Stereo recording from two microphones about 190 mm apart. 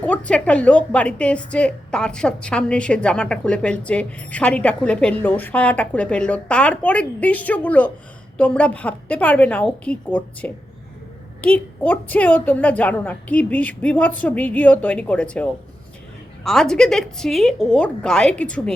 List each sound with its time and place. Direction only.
0.0 s a woman's voice: 5° left (ahead or behind)